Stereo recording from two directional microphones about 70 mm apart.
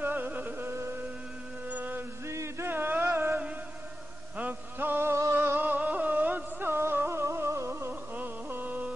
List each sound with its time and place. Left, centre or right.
0.0 s music: right
1.7 s music: right
2.2 s a sound: right
4.4 s a sound: right
5.1 s music: right
7.9 s music: right